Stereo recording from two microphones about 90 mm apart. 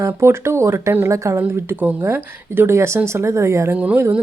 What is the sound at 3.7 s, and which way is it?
Speech, 15° right (ahead or behind).